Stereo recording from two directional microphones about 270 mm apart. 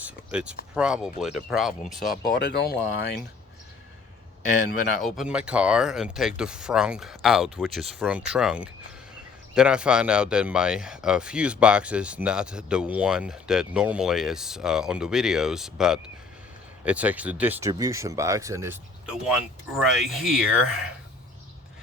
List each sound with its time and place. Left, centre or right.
0.0 s speech: centre
2.4 s speech: left
4.9 s speech: centre